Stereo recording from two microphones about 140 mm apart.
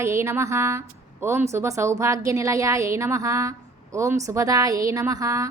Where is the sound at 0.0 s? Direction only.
20° right (ahead or behind).